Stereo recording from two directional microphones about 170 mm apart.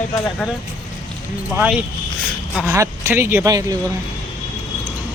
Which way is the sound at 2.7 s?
15° right (ahead or behind).